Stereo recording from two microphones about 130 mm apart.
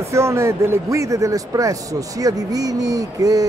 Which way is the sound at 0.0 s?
20° right (ahead or behind).